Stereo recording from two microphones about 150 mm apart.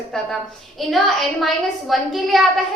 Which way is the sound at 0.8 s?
Centre (ahead or behind).